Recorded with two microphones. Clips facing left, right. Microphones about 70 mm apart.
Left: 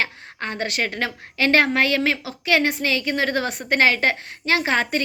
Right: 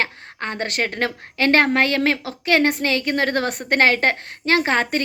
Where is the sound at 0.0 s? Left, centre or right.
Right.